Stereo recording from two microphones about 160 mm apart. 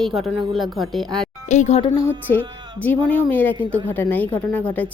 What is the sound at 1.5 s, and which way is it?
Speech, 45° left (ahead or behind).